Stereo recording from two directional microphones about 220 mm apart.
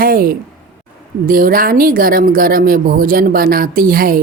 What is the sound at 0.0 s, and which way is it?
A woman's voice, 40° right (ahead or behind).